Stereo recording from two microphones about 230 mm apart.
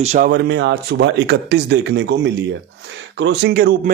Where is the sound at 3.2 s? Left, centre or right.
Right.